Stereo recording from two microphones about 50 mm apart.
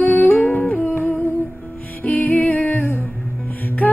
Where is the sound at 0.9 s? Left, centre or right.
Left.